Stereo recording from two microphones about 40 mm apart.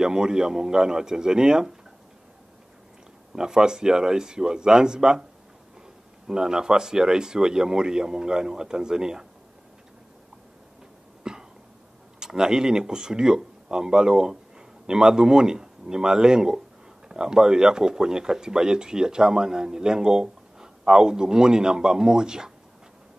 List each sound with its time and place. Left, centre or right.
0.0 s speech: centre
3.3 s speech: centre
6.2 s speech: centre
11.3 s cough: centre
12.2 s speech: centre